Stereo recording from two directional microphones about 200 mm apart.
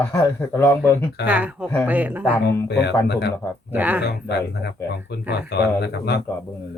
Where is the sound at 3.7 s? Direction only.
10° right (ahead or behind).